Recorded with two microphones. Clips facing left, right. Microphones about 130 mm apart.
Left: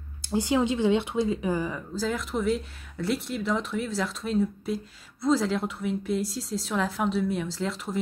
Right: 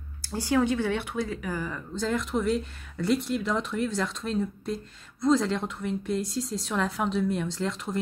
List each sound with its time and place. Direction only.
0.2 s speech: 20° left (ahead or behind)
2.0 s speech: centre (ahead or behind)